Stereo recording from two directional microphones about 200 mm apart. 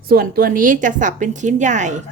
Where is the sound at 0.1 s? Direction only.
50° right (ahead or behind).